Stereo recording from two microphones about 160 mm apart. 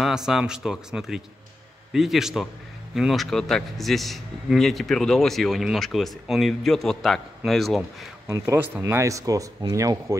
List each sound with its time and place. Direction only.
0.0 s a man's voice: 5° right (ahead or behind)
8.3 s speech: 20° right (ahead or behind)